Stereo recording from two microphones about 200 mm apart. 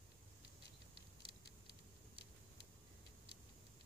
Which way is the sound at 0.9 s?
25° right (ahead or behind).